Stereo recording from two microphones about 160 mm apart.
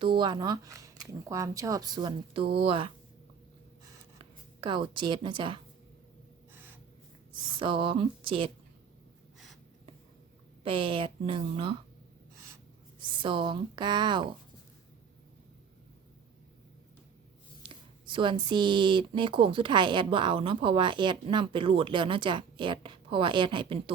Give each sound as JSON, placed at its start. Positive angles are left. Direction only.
{"t": 0.0, "sound": "speech", "side_deg": -30}
{"t": 4.2, "sound": "speech", "side_deg": -30}
{"t": 6.5, "sound": "gasp", "side_deg": -15}
{"t": 7.5, "sound": "speech", "side_deg": -30}
{"t": 10.6, "sound": "speech", "side_deg": -35}
{"t": 13.0, "sound": "speech", "side_deg": -30}
{"t": 17.6, "sound": "speech", "side_deg": -30}